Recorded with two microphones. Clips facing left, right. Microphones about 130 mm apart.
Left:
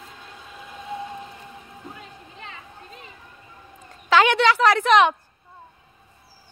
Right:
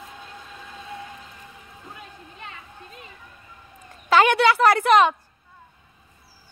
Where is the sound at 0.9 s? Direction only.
20° left (ahead or behind).